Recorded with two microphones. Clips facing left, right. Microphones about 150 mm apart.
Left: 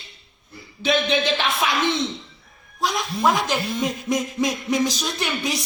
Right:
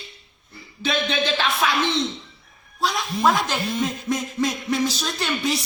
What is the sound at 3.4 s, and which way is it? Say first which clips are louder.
A woman's voice: left 1 dB; 15° left (ahead or behind).